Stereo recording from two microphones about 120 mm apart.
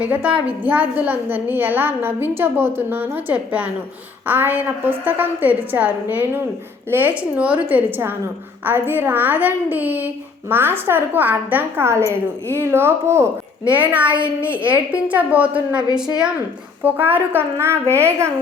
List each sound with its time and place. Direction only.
0.0 s a woman's voice: 10° right (ahead or behind)
14.5 s a woman's voice: 45° right (ahead or behind)
15.0 s a woman's voice: 15° right (ahead or behind)
16.8 s a woman's voice: 15° right (ahead or behind)